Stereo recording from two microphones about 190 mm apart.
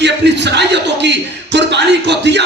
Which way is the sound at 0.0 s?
65° right (ahead or behind).